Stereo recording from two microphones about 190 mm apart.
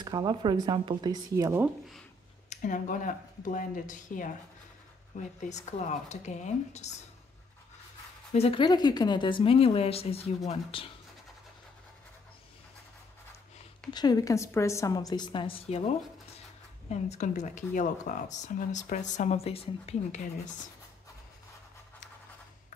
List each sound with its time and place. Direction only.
0.0 s speech: 20° right (ahead or behind)
2.5 s speech: 45° left (ahead or behind)
8.3 s speech: 30° left (ahead or behind)
13.8 s speech: 20° left (ahead or behind)
16.9 s speech: 35° left (ahead or behind)